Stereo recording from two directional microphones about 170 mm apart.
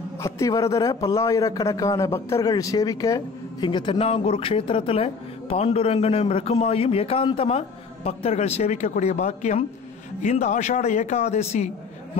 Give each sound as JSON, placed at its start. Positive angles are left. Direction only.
{"t": 0.2, "sound": "a man's voice", "side_deg": 20}